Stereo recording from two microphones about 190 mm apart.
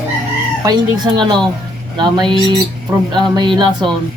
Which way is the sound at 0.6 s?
20° right (ahead or behind).